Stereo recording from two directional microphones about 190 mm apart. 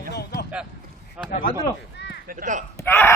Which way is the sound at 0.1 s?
55° left (ahead or behind).